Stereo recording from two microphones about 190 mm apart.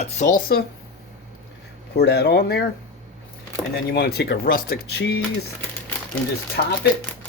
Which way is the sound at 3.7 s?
60° left (ahead or behind).